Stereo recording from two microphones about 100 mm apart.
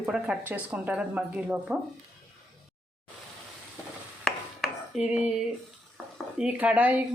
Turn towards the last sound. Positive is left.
turn(degrees=-15)  # may be behind; listen again after turning